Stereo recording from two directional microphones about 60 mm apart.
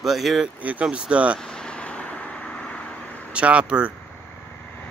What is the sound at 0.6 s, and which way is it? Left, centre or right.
Speech, right.